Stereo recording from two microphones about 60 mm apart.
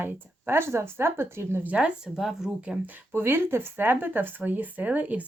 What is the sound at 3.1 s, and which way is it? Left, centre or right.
Speech, right.